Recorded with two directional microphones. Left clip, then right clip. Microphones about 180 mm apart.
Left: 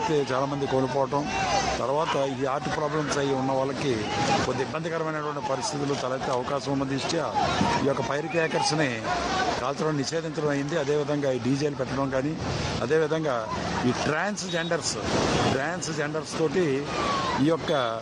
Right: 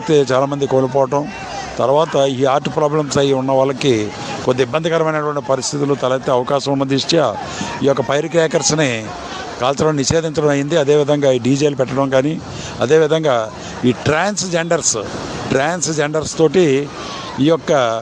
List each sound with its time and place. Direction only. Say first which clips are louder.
0.1 s speech: right 12 dB; 40° right (ahead or behind)